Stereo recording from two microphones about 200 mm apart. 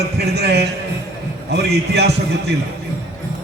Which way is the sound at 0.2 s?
55° right (ahead or behind).